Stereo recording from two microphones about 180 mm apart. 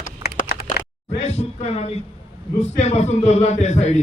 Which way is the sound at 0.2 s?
55° left (ahead or behind).